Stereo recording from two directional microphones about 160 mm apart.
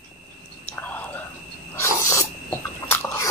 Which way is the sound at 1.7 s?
15° left (ahead or behind).